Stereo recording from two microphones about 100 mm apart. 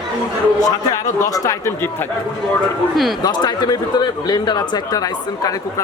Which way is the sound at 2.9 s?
Centre (ahead or behind).